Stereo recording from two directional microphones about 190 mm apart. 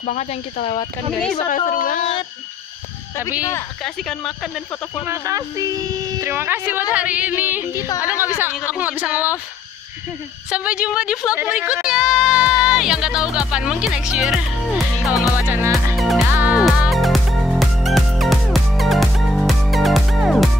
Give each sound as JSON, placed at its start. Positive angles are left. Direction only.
{"t": 0.0, "sound": "speech", "side_deg": 40}
{"t": 1.7, "sound": "speech", "side_deg": 45}
{"t": 3.8, "sound": "speech", "side_deg": 0}
{"t": 5.0, "sound": "speech", "side_deg": -15}
{"t": 7.7, "sound": "speech", "side_deg": 15}
{"t": 8.0, "sound": "speech", "side_deg": -10}
{"t": 10.5, "sound": "a woman's voice", "side_deg": -5}
{"t": 15.3, "sound": "music", "side_deg": -10}